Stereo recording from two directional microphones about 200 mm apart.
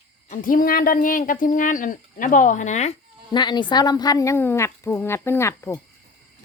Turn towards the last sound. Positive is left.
turn(degrees=15)  # may be behind; listen again after turning